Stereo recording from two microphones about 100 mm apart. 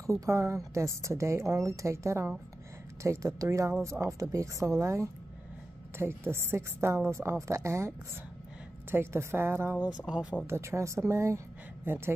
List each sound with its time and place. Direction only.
0.0 s a woman's voice: 30° right (ahead or behind)
8.9 s a woman's voice: 25° right (ahead or behind)
10.1 s speech: 10° right (ahead or behind)
10.4 s a woman's voice: 25° right (ahead or behind)